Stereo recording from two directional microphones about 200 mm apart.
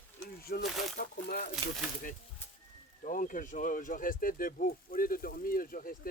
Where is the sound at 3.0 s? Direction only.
40° left (ahead or behind).